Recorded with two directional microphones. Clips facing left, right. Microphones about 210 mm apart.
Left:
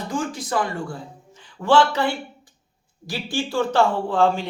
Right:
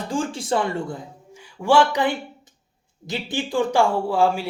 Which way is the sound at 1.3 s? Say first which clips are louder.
Even; 10° right (ahead or behind).